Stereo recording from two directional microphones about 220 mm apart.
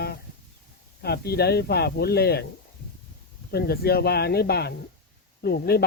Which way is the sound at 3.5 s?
45° left (ahead or behind).